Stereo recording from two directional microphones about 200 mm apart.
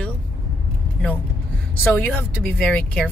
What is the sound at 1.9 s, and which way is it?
Speech, 10° left (ahead or behind).